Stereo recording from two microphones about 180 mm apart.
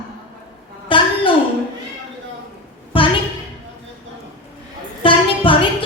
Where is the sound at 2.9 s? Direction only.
30° left (ahead or behind).